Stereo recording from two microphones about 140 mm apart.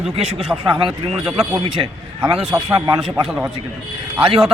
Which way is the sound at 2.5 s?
30° right (ahead or behind).